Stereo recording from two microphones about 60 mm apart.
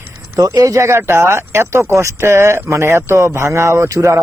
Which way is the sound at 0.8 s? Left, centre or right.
Right.